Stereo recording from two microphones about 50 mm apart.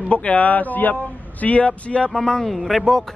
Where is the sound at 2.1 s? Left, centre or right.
Centre.